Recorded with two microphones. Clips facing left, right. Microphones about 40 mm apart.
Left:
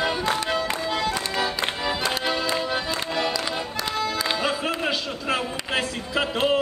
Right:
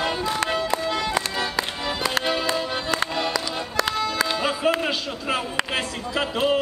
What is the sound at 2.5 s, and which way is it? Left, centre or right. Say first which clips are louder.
Music: right 1 dB; right.